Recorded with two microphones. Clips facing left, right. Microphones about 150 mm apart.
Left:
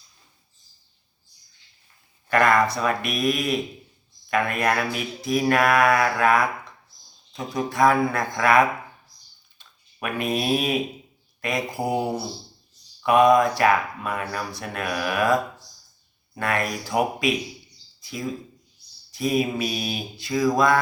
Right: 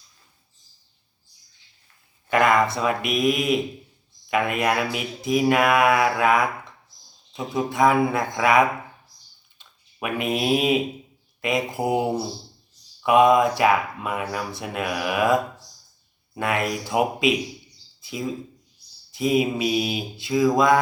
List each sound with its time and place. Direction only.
2.3 s speech: 15° right (ahead or behind)
7.5 s speech: 20° right (ahead or behind)